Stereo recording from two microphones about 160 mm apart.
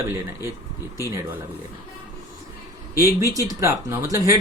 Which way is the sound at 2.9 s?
20° right (ahead or behind).